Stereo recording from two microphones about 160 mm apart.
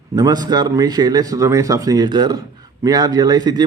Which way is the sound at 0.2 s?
25° right (ahead or behind).